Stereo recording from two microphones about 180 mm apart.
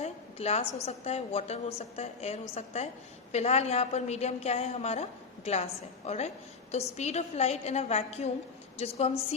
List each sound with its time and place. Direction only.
0.0 s a woman's voice: 35° left (ahead or behind)